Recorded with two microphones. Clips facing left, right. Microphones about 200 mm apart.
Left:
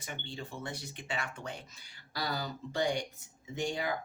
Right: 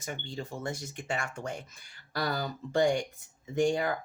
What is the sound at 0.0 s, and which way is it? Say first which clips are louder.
Speech: right 4 dB; 45° right (ahead or behind).